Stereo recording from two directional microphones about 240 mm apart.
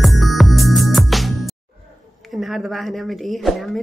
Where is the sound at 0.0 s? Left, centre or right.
Centre.